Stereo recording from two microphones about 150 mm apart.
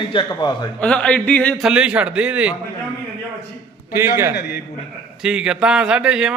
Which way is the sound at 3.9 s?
15° right (ahead or behind).